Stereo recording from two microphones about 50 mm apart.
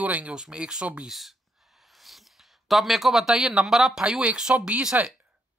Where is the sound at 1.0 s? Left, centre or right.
Centre.